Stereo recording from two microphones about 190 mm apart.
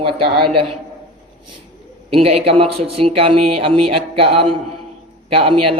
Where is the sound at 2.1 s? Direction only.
30° right (ahead or behind).